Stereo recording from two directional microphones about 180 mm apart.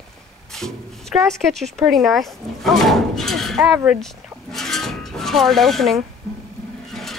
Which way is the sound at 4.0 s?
Centre (ahead or behind).